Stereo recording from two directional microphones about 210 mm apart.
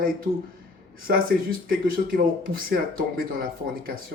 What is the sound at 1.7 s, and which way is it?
Speech, 45° right (ahead or behind).